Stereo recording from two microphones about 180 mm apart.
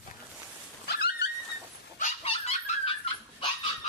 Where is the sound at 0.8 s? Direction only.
60° left (ahead or behind).